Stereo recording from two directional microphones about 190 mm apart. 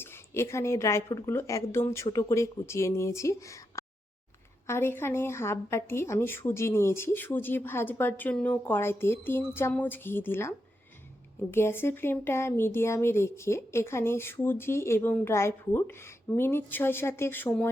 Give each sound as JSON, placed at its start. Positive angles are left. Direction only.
{"t": 0.0, "sound": "a woman's voice", "side_deg": 15}
{"t": 11.5, "sound": "a woman's voice", "side_deg": 10}